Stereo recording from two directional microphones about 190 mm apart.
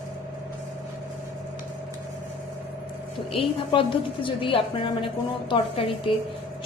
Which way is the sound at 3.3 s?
30° left (ahead or behind).